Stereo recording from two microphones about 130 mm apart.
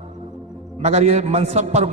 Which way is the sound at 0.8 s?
55° right (ahead or behind).